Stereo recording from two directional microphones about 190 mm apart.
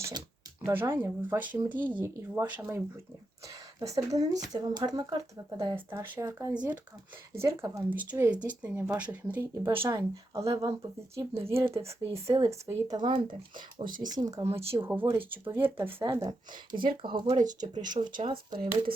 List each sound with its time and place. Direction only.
0.6 s speech: 10° right (ahead or behind)
17.6 s speech: 40° right (ahead or behind)
18.2 s speech: 25° right (ahead or behind)